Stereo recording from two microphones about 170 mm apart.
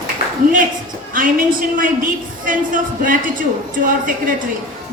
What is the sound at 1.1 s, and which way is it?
A woman's voice, 55° right (ahead or behind).